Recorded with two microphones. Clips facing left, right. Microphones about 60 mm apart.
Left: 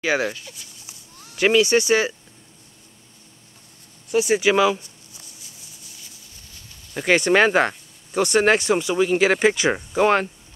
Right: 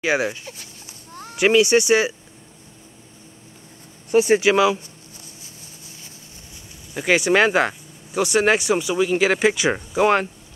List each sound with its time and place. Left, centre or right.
0.0 s speech: centre
0.5 s a sound: right
1.3 s speech: centre
4.1 s speech: right
4.5 s speech: centre
6.9 s speech: centre